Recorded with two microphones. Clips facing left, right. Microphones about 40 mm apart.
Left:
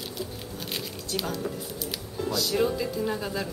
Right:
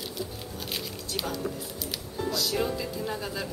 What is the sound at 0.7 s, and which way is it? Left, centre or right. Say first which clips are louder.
Speech: left 2 dB; centre.